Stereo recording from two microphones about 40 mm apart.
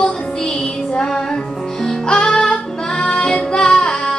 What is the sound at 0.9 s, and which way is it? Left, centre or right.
Music, centre.